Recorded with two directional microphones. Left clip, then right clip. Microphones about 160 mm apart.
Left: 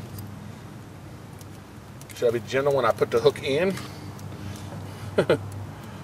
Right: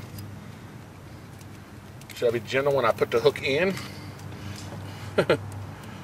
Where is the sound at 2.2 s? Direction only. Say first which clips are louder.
Left 1 dB; centre (ahead or behind).